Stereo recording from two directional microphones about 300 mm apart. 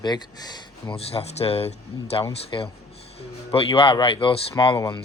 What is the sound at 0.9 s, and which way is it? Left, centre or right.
Speech, centre.